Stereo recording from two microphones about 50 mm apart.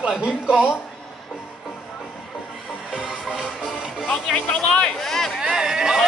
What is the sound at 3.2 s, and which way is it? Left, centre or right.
Music, centre.